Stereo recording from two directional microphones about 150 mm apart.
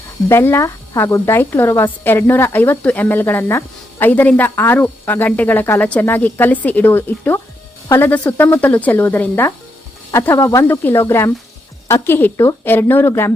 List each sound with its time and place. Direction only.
0.3 s speech: 15° left (ahead or behind)